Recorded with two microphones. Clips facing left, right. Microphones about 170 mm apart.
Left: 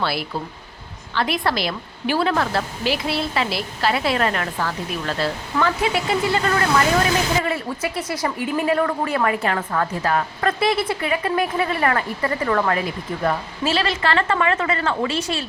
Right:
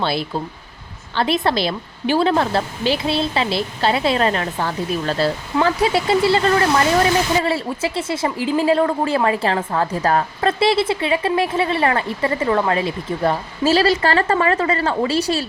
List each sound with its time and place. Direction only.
0.0 s a woman's voice: 25° right (ahead or behind)
13.7 s a woman's voice: 35° right (ahead or behind)